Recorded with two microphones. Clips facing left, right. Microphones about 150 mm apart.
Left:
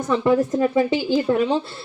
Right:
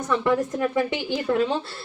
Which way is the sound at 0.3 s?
30° left (ahead or behind).